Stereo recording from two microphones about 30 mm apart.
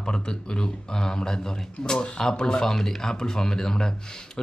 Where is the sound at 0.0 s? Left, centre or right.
Left.